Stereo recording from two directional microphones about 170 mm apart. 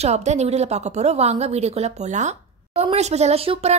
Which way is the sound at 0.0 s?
40° right (ahead or behind).